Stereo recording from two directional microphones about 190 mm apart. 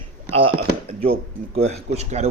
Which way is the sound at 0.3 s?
30° right (ahead or behind).